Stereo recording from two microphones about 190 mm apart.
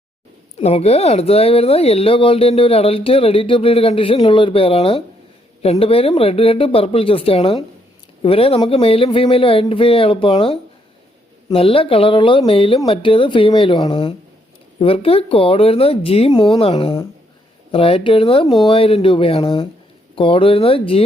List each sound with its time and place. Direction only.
0.6 s speech: 35° left (ahead or behind)